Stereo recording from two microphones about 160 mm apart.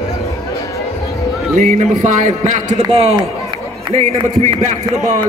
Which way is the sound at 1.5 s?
50° right (ahead or behind).